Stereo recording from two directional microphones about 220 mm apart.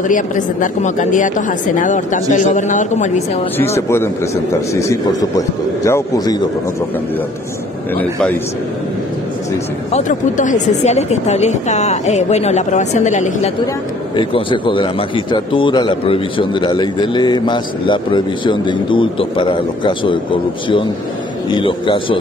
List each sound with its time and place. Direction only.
0.1 s a woman's voice: 35° left (ahead or behind)
3.5 s speech: 10° left (ahead or behind)
9.9 s a woman's voice: 35° left (ahead or behind)
14.1 s a man's voice: 20° left (ahead or behind)